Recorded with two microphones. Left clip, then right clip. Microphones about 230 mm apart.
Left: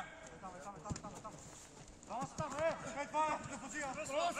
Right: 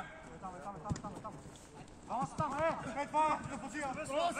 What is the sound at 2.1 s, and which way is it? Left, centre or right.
Speech, right.